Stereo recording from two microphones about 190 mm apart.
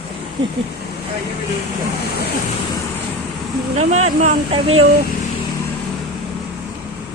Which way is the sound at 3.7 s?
35° right (ahead or behind).